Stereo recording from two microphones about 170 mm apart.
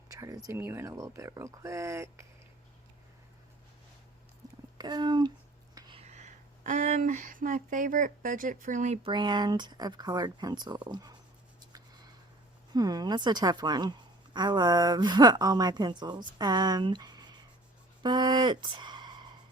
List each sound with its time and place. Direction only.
0.2 s speech: 20° right (ahead or behind)
4.4 s stomach rumble: 20° right (ahead or behind)
4.8 s a woman's voice: 25° right (ahead or behind)
5.7 s whispering: 25° right (ahead or behind)
6.0 s speech: 40° right (ahead or behind)
9.0 s a woman's voice: 25° right (ahead or behind)
12.7 s a woman's voice: 20° right (ahead or behind)